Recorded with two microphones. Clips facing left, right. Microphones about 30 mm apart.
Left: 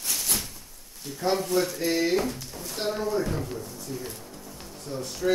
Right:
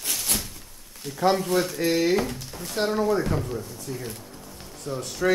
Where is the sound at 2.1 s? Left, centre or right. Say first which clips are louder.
Right 1 dB; right.